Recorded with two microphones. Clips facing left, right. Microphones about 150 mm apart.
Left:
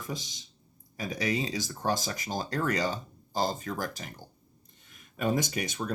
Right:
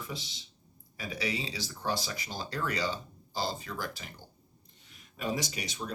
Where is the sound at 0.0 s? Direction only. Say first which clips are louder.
Left 3 dB; 45° left (ahead or behind).